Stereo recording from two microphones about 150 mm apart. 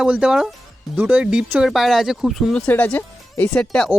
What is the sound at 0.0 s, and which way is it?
Speech, 5° right (ahead or behind).